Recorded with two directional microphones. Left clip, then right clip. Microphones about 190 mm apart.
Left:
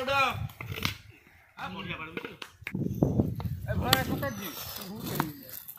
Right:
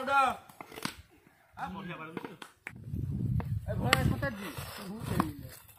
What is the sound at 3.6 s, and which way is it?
Speech, 20° right (ahead or behind).